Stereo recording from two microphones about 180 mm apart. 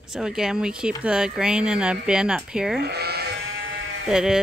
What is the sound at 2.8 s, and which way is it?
Sheep, 60° right (ahead or behind).